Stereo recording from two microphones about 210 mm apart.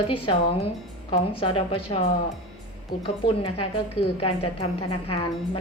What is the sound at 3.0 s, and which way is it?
A woman's voice, 25° left (ahead or behind).